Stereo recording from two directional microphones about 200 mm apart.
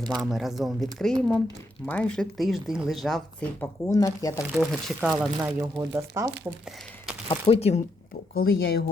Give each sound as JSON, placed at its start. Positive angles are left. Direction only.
{"t": 0.2, "sound": "speech", "side_deg": 0}
{"t": 4.5, "sound": "speech", "side_deg": 0}
{"t": 5.4, "sound": "speech", "side_deg": -15}
{"t": 6.7, "sound": "a sound", "side_deg": 0}
{"t": 7.3, "sound": "speech", "side_deg": 30}
{"t": 8.4, "sound": "speech", "side_deg": 50}